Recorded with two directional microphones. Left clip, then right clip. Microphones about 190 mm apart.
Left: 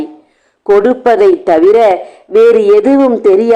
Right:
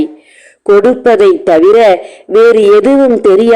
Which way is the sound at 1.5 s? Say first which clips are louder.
Right 3 dB; 30° right (ahead or behind).